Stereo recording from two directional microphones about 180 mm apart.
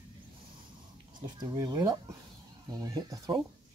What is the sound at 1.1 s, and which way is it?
Speech, 25° right (ahead or behind).